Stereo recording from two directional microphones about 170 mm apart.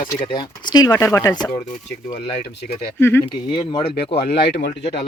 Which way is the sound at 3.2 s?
30° left (ahead or behind).